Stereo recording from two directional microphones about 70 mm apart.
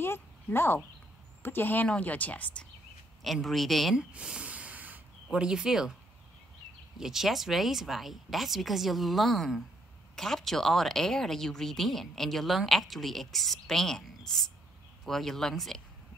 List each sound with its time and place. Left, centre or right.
0.0 s a woman's voice: left
3.3 s a woman's voice: centre
3.9 s a sound: centre
5.3 s speech: centre
7.0 s a woman's voice: centre